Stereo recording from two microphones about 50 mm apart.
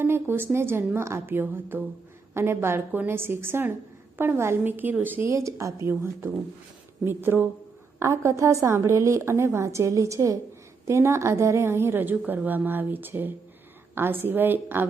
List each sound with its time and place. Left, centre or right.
0.0 s speech: right
0.9 s a woman's voice: right
1.3 s speech: right
2.3 s a woman's voice: right
4.6 s speech: right
5.3 s speech: right
7.0 s speech: right
7.9 s a woman's voice: right
10.8 s a woman's voice: right
12.2 s speech: right